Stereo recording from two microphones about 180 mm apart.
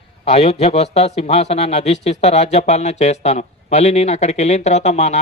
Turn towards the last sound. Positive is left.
turn(degrees=35)  # may be behind; listen again after turning